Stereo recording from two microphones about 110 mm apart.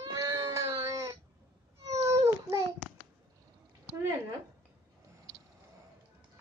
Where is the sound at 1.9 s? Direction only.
30° right (ahead or behind).